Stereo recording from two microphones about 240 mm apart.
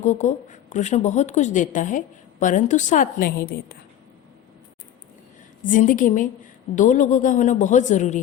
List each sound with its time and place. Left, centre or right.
0.0 s a woman's voice: left
5.6 s a woman's voice: left